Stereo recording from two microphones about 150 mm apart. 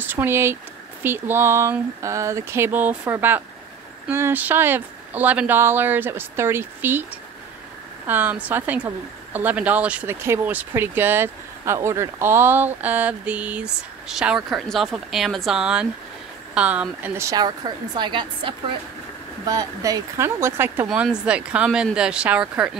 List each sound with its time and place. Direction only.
0.0 s speech: 15° right (ahead or behind)
8.1 s speech: 10° right (ahead or behind)
17.3 s speech: 25° right (ahead or behind); by 22.8 s 5° right (ahead or behind)